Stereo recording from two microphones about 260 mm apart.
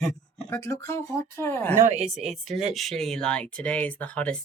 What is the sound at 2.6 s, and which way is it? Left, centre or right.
Speech, centre.